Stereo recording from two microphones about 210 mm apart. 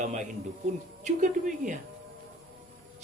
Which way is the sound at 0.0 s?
35° right (ahead or behind).